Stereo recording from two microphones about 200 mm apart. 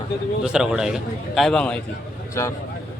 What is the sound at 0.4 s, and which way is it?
A man's voice, 5° right (ahead or behind).